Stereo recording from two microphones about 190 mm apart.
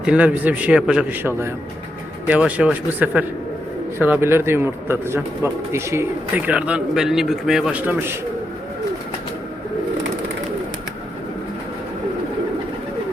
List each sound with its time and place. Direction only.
0.0 s a man's voice: 5° right (ahead or behind)